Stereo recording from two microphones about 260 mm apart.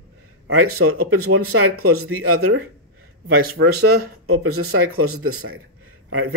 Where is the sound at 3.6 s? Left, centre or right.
Right.